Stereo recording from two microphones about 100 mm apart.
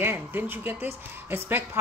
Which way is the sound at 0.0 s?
20° right (ahead or behind).